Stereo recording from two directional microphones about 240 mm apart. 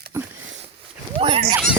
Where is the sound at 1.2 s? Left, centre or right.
Right.